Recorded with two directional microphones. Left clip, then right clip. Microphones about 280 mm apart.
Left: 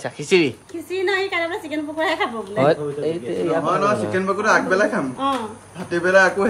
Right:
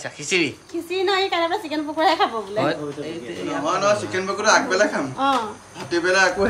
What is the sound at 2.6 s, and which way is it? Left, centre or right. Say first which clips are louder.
A man's voice: left 7 dB; centre.